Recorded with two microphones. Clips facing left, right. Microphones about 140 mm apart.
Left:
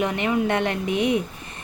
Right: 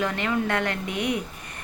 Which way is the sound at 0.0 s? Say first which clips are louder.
Left 3 dB; 20° left (ahead or behind).